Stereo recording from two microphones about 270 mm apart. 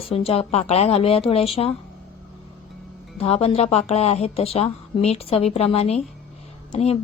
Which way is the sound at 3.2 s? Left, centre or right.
Left.